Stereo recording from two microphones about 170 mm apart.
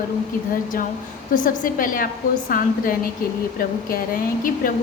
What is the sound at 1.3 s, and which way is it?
A woman's voice, 55° left (ahead or behind).